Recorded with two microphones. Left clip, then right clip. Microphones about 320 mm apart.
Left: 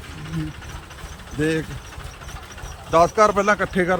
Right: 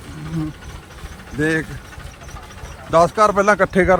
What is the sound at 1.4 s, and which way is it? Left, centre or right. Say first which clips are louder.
Speech: right 3 dB; centre.